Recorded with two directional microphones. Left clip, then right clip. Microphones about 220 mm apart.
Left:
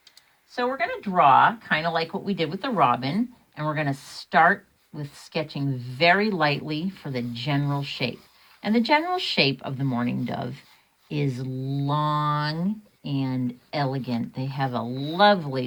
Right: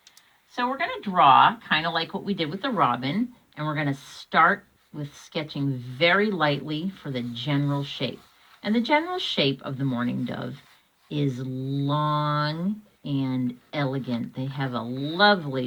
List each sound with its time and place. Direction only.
0.6 s speech: 35° left (ahead or behind)
8.9 s speech: 40° left (ahead or behind)